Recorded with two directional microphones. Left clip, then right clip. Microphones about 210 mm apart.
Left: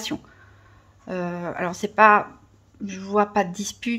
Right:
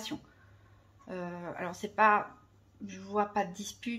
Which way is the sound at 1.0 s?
40° left (ahead or behind).